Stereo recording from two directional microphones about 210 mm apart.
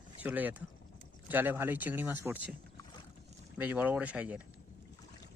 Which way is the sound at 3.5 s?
10° right (ahead or behind).